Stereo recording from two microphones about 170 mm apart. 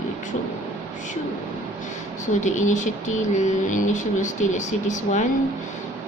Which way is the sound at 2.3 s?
45° left (ahead or behind).